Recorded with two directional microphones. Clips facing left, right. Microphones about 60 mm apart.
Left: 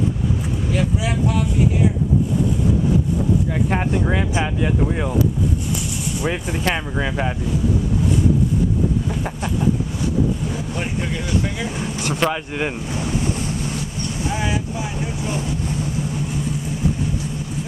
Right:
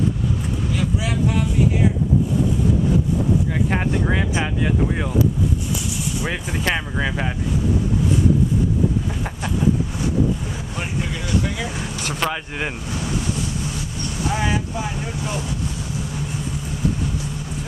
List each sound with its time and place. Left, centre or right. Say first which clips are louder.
3.7 s speech: left 1 dB; centre
6.2 s speech: left 3 dB; centre
12.2 s speech: left 3 dB; centre
12.9 s ocean: left 2 dB; left
14.4 s speech: right 1 dB; centre
15.2 s speech: left 2 dB; left